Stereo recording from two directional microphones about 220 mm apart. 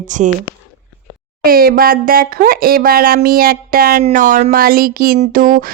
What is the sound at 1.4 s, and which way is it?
Speech, 40° right (ahead or behind).